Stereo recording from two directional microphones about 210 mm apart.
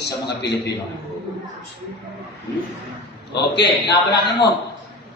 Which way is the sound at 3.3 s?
55° left (ahead or behind).